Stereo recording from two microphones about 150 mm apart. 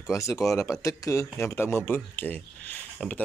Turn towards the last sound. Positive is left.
turn(degrees=10)  # may be behind; listen again after turning